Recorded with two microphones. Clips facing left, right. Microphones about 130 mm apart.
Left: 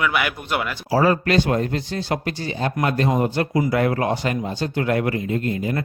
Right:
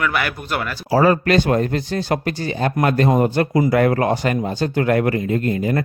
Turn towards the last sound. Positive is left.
turn(degrees=-55)  # may be behind; listen again after turning